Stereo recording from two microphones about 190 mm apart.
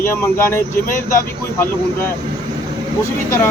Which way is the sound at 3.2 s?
15° left (ahead or behind).